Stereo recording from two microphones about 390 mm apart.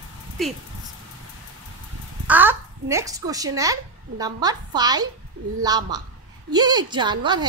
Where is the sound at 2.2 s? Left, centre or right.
Centre.